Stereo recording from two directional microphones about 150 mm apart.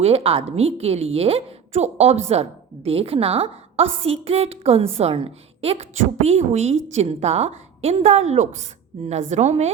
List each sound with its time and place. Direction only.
0.0 s a woman's voice: 40° right (ahead or behind)